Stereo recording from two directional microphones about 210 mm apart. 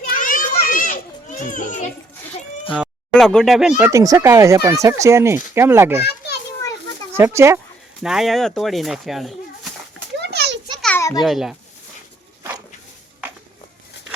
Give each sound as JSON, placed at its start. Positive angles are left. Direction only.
{"t": 0.0, "sound": "children playing", "side_deg": 40}
{"t": 2.8, "sound": "a sound", "side_deg": 0}
{"t": 3.8, "sound": "speech", "side_deg": -10}
{"t": 6.1, "sound": "children playing", "side_deg": 50}
{"t": 6.6, "sound": "children playing", "side_deg": 15}
{"t": 7.2, "sound": "speech", "side_deg": -10}
{"t": 8.0, "sound": "speech", "side_deg": 0}
{"t": 10.8, "sound": "a sound", "side_deg": 5}
{"t": 11.2, "sound": "speech", "side_deg": 0}